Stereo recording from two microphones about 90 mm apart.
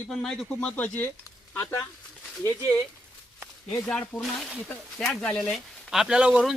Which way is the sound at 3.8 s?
10° left (ahead or behind).